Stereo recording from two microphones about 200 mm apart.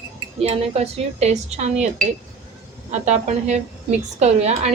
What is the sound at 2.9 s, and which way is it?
Speech, 35° right (ahead or behind).